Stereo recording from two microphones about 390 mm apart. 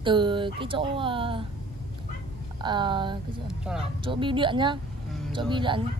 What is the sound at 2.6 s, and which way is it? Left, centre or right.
Speech, centre.